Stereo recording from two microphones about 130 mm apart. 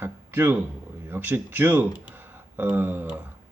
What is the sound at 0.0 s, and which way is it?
A man's voice, 15° right (ahead or behind).